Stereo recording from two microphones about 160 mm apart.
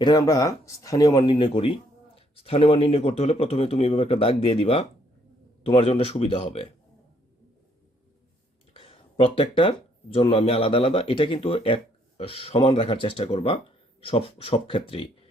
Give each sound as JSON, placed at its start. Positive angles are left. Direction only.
{"t": 0.0, "sound": "a man's voice", "side_deg": 25}
{"t": 8.7, "sound": "a man's voice", "side_deg": 35}